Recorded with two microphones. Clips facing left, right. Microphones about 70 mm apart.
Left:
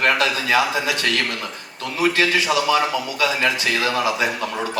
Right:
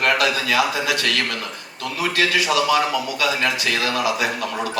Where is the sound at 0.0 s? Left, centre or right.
Left.